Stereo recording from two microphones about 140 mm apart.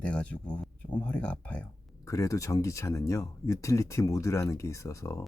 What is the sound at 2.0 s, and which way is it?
Speech, 20° left (ahead or behind).